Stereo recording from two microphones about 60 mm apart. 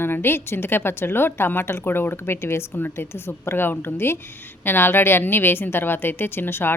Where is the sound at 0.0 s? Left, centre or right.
Left.